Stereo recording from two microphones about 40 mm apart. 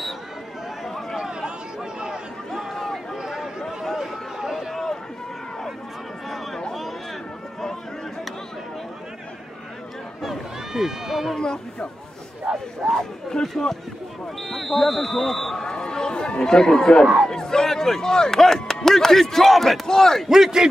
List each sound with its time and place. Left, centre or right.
0.8 s chatter: centre
1.2 s chatter: centre
2.5 s a sound: centre
3.2 s a sound: centre
3.6 s a sound: centre
4.5 s run: centre
10.2 s run: centre
11.3 s speech: centre
12.5 s speech: centre
12.9 s speech: centre
15.5 s a sound: centre
17.3 s speech: centre
20.2 s a man's voice: centre